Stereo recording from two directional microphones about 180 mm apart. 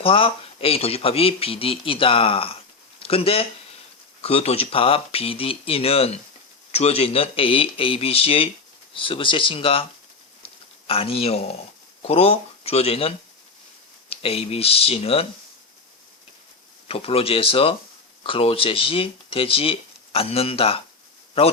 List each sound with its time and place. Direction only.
0.0 s speech: 30° left (ahead or behind)
10.4 s a sound: 30° left (ahead or behind)
12.0 s speech: 35° left (ahead or behind)
16.9 s speech: 30° left (ahead or behind)